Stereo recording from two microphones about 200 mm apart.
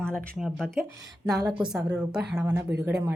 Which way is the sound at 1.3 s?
20° right (ahead or behind).